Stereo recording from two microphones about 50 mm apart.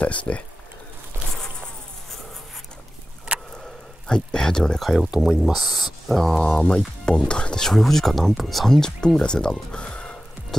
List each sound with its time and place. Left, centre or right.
0.0 s speech: left
3.3 s a sound: right
4.1 s speech: centre
4.7 s speech: centre
7.1 s speech: centre